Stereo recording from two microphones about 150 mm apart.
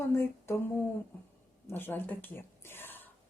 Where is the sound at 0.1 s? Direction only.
15° left (ahead or behind).